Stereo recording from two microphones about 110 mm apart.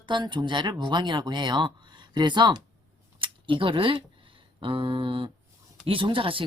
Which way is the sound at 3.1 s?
50° right (ahead or behind).